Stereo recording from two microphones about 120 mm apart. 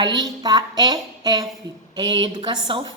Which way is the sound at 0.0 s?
35° right (ahead or behind).